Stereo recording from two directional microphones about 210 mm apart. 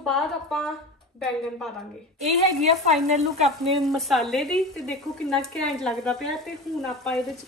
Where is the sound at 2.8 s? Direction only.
30° right (ahead or behind).